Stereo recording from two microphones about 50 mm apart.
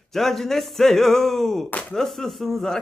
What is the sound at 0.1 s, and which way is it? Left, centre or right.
Speech, centre.